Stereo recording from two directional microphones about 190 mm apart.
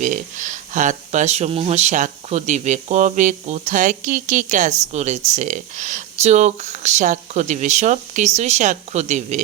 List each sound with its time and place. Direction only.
0.0 s speech: 40° right (ahead or behind)